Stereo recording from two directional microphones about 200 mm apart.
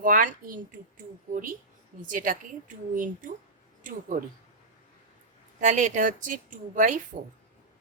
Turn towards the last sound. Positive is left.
turn(degrees=-40)  # may be behind; listen again after turning